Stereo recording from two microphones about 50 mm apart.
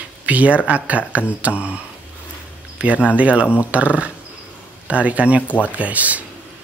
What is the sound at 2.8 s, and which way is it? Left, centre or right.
Speech, right.